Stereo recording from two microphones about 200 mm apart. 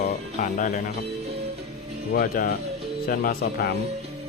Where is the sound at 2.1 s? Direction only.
50° left (ahead or behind).